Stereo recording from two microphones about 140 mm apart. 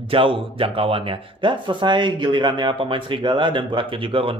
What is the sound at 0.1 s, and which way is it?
Speech, 40° right (ahead or behind).